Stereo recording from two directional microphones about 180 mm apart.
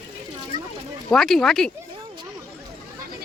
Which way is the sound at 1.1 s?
Centre (ahead or behind).